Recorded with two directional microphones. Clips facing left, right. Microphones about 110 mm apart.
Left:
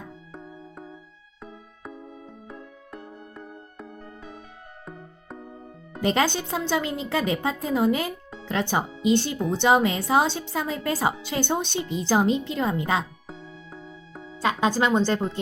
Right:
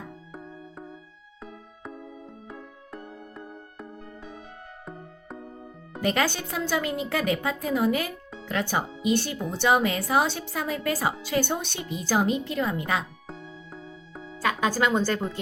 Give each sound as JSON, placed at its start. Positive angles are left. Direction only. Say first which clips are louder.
{"t": 0.3, "sound": "music", "louder": "even", "side_deg": 0}
{"t": 6.0, "sound": "speech", "louder": "left 2 dB", "side_deg": 25}
{"t": 13.2, "sound": "music", "louder": "even", "side_deg": 0}
{"t": 14.3, "sound": "speech", "louder": "left 2 dB", "side_deg": 25}